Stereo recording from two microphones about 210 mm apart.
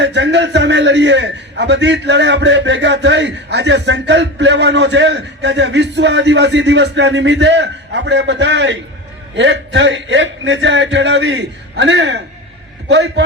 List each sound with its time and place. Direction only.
0.0 s a man's voice: 55° right (ahead or behind)